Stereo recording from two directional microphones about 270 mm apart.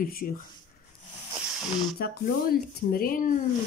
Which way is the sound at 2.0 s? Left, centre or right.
Left.